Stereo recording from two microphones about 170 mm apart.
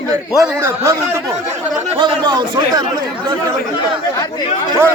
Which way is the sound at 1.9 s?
25° right (ahead or behind).